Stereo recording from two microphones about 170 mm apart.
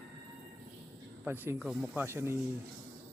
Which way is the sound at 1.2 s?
10° right (ahead or behind).